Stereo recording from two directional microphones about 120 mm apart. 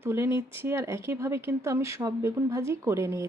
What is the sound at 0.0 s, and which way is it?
Speech, 20° right (ahead or behind).